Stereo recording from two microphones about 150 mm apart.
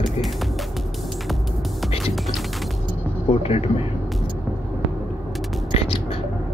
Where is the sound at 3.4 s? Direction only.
45° left (ahead or behind).